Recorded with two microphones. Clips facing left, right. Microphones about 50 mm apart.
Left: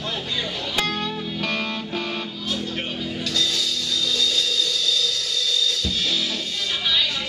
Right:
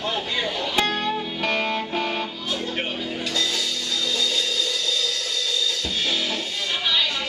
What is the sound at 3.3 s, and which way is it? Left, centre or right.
Music, centre.